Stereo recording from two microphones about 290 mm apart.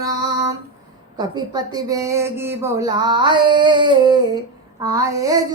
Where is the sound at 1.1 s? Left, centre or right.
Centre.